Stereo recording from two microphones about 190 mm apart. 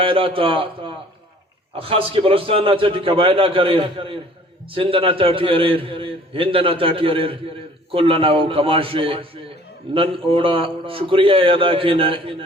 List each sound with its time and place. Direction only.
0.0 s a man's voice: 30° right (ahead or behind)